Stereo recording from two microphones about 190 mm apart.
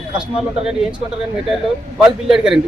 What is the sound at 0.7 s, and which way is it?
Speech, 5° right (ahead or behind).